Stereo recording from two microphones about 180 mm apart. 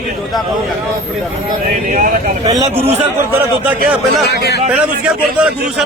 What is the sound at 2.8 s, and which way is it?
Speech, 35° right (ahead or behind).